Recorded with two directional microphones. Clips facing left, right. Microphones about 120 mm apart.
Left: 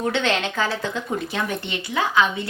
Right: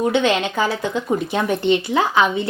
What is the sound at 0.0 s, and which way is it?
A woman's voice, 15° right (ahead or behind).